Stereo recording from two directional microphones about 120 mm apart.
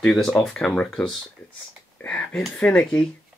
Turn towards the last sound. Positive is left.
turn(degrees=10)  # may be behind; listen again after turning